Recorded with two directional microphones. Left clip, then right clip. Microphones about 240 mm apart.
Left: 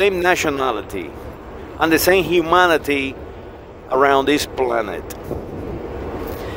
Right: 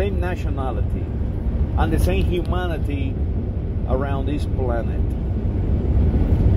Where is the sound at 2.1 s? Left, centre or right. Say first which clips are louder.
Left 9 dB; left.